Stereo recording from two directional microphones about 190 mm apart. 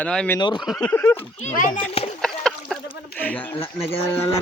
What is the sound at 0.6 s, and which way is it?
Speech, 5° left (ahead or behind).